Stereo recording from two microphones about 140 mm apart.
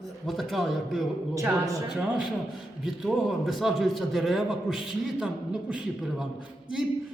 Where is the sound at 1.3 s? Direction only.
20° right (ahead or behind).